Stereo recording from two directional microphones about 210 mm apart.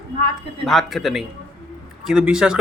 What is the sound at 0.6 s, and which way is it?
A man's voice, centre (ahead or behind).